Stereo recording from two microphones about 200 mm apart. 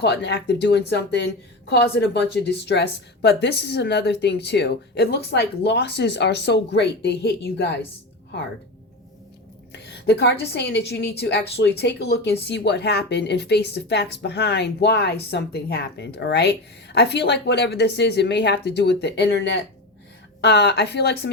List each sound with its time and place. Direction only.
0.0 s a woman's voice: 60° left (ahead or behind)
9.7 s a woman's voice: 55° left (ahead or behind)